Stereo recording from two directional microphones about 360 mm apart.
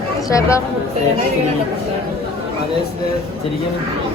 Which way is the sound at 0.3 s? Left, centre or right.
Centre.